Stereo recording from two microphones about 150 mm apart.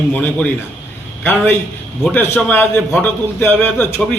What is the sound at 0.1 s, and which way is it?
A man's voice, 10° left (ahead or behind).